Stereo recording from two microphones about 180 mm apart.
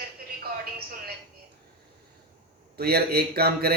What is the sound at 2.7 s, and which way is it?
A man's voice, 60° right (ahead or behind).